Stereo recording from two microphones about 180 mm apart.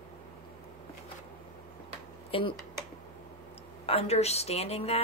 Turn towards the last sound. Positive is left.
turn(degrees=35)  # may be behind; listen again after turning